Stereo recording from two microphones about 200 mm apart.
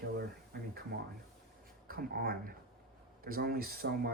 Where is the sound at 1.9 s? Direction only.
50° right (ahead or behind).